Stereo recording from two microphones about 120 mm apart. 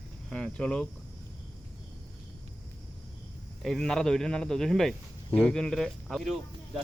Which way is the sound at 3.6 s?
5° left (ahead or behind).